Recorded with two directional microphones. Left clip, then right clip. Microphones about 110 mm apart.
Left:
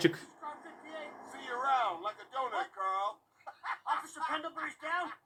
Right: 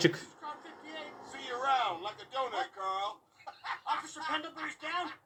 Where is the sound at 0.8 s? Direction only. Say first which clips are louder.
Even; 90° left.